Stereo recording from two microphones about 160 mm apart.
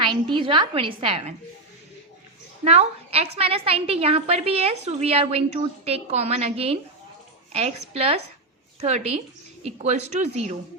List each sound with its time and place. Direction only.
0.3 s a woman's voice: 30° right (ahead or behind)
2.6 s a woman's voice: 40° right (ahead or behind)